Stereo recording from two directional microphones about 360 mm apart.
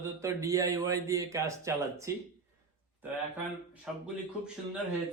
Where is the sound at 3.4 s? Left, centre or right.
Centre.